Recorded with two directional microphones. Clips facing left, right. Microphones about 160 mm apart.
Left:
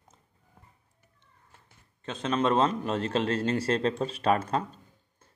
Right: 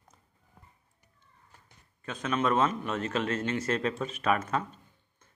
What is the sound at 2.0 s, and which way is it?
A man's voice, 30° left (ahead or behind).